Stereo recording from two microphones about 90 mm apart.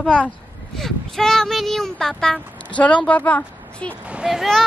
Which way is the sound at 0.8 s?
5° left (ahead or behind).